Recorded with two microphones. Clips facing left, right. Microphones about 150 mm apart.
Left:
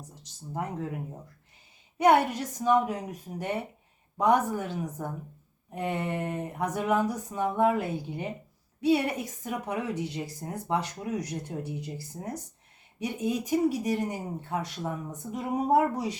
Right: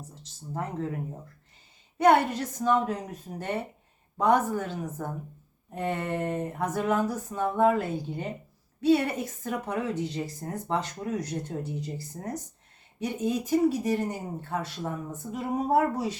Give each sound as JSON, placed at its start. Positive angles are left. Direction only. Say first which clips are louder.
{"t": 0.1, "sound": "a woman's voice", "louder": "left 1 dB", "side_deg": 15}
{"t": 2.0, "sound": "a woman's voice", "louder": "right 1 dB", "side_deg": 10}